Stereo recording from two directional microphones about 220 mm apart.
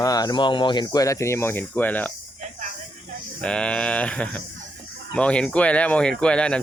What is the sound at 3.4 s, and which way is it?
Speech, 5° left (ahead or behind).